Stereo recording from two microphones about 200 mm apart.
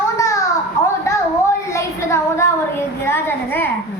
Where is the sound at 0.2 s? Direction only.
15° left (ahead or behind).